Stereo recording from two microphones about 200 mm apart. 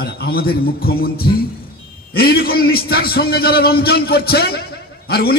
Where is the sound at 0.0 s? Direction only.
50° left (ahead or behind).